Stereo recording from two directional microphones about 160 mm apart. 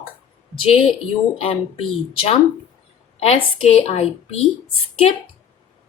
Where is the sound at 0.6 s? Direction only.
35° left (ahead or behind).